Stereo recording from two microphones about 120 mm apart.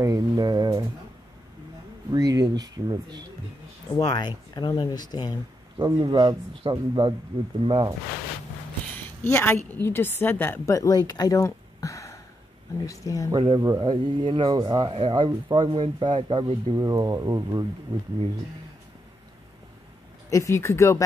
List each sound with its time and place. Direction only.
0.0 s speech: 30° right (ahead or behind)
2.0 s speech: 30° right (ahead or behind)
4.0 s speech: 30° left (ahead or behind)
5.8 s speech: 35° right (ahead or behind)
8.9 s a sound: 15° left (ahead or behind)
9.7 s a woman's voice: 20° left (ahead or behind)
13.4 s speech: 40° right (ahead or behind)
16.8 s speech: 35° right (ahead or behind)
20.2 s speech: 25° left (ahead or behind)